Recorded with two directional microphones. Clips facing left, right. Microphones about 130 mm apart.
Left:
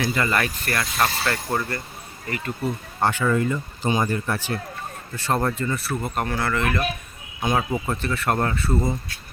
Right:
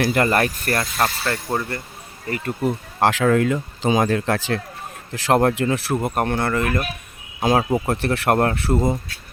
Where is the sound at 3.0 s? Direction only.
90° right.